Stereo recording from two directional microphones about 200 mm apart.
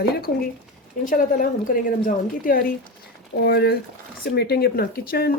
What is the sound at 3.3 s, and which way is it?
Speech, 55° left (ahead or behind).